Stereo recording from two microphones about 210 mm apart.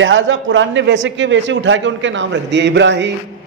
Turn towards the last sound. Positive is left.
turn(degrees=-55)  # may be behind; listen again after turning